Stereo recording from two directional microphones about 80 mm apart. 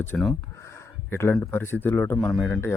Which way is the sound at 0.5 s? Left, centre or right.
Left.